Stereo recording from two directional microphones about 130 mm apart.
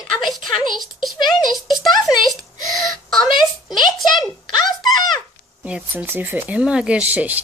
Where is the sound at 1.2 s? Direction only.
35° left (ahead or behind).